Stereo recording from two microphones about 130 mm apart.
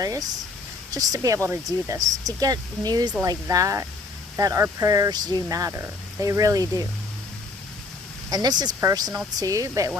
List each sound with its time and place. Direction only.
0.0 s speech: 25° right (ahead or behind)
8.3 s speech: 30° right (ahead or behind)